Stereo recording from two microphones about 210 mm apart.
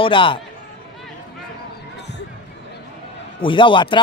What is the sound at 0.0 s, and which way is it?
Speech, 25° left (ahead or behind).